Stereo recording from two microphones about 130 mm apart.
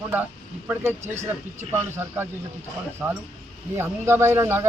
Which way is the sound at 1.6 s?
60° right (ahead or behind).